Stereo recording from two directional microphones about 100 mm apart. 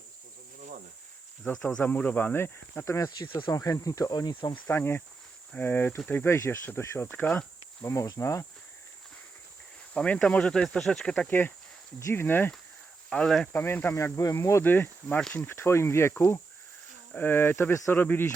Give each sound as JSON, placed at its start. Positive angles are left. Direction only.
{"t": 1.6, "sound": "speech", "side_deg": 15}
{"t": 3.2, "sound": "speech", "side_deg": 50}
{"t": 3.5, "sound": "speech", "side_deg": 35}
{"t": 4.6, "sound": "speech", "side_deg": 20}
{"t": 6.7, "sound": "insect", "side_deg": 25}
{"t": 7.9, "sound": "speech", "side_deg": 35}
{"t": 9.9, "sound": "speech", "side_deg": 10}
{"t": 11.3, "sound": "speech", "side_deg": 20}
{"t": 13.1, "sound": "speech", "side_deg": 10}
{"t": 13.5, "sound": "speech", "side_deg": 20}
{"t": 13.9, "sound": "speech", "side_deg": 30}